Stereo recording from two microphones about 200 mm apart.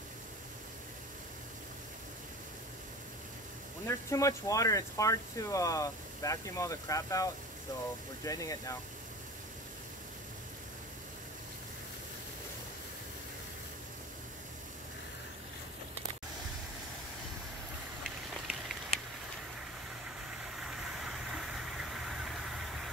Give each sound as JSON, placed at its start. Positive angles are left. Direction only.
{"t": 3.8, "sound": "speech", "side_deg": 15}
{"t": 20.5, "sound": "vehicle", "side_deg": 0}